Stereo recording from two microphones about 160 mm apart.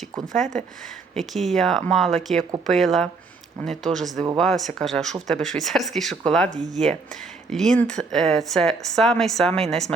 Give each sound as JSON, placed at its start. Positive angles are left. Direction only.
{"t": 0.3, "sound": "speech", "side_deg": -50}
{"t": 1.1, "sound": "speech", "side_deg": 0}
{"t": 6.5, "sound": "speech", "side_deg": -50}
{"t": 7.5, "sound": "speech", "side_deg": 5}